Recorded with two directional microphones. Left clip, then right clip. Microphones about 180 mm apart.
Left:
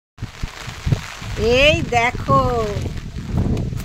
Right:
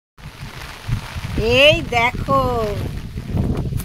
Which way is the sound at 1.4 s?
5° right (ahead or behind).